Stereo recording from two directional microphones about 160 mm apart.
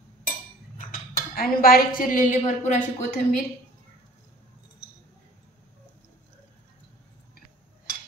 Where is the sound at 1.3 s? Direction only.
70° left (ahead or behind); by 3.1 s 50° left (ahead or behind).